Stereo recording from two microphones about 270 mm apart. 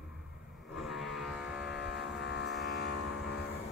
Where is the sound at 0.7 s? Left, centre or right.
Centre.